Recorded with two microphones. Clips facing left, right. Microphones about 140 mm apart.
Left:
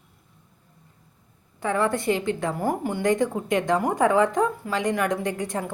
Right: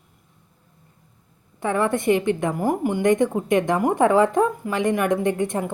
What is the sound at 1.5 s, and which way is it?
A woman's voice, 20° right (ahead or behind).